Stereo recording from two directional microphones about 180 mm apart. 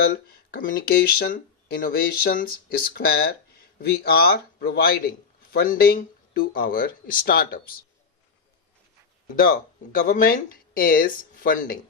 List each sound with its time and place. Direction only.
0.1 s a man's voice: 55° left (ahead or behind)
9.2 s speech: 50° left (ahead or behind)